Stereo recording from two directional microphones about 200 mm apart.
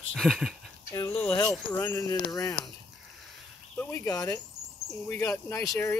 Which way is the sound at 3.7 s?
15° left (ahead or behind).